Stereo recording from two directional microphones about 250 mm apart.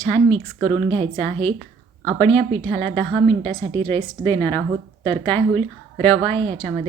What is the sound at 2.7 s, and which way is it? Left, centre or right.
A woman's voice, centre.